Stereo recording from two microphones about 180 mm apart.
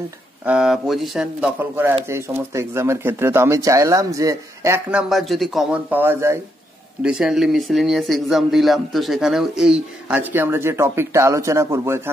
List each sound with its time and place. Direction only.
0.5 s speech: 5° right (ahead or behind)
4.9 s speech: centre (ahead or behind)